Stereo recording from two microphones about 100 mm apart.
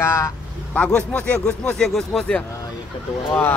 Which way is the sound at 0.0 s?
25° left (ahead or behind).